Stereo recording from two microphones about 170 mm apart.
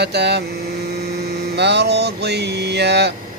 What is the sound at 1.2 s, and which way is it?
Mains hum, 80° right.